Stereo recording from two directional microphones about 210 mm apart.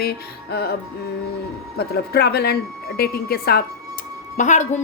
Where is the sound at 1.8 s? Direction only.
50° left (ahead or behind).